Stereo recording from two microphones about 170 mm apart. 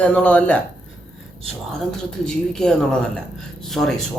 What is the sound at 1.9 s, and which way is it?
Speech, 5° left (ahead or behind).